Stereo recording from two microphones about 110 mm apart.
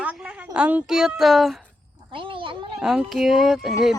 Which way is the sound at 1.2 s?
Centre (ahead or behind).